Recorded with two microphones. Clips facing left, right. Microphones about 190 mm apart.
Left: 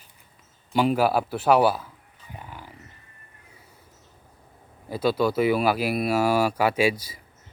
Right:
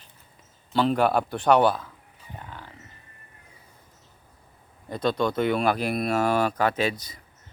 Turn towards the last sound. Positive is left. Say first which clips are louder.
# left 4 dB
turn(degrees=10)  # may be behind; listen again after turning